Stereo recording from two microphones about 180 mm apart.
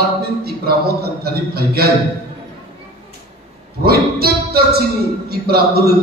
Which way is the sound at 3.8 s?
60° right (ahead or behind).